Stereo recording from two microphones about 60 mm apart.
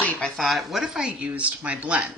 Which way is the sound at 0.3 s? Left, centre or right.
Centre.